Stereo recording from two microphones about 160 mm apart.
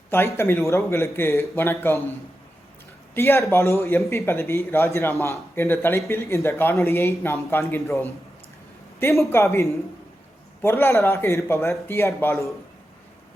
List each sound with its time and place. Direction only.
0.1 s speech: 15° left (ahead or behind)
3.2 s speech: 15° left (ahead or behind)